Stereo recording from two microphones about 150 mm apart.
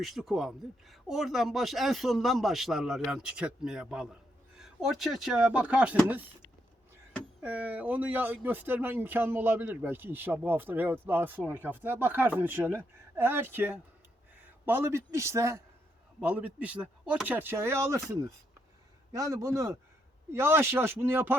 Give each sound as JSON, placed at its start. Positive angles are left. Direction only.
{"t": 0.0, "sound": "speech", "side_deg": 0}
{"t": 7.4, "sound": "a man's voice", "side_deg": -10}
{"t": 16.2, "sound": "a man's voice", "side_deg": -10}